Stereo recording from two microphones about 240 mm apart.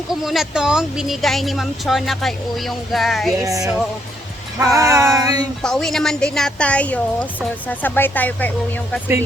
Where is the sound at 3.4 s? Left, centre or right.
Centre.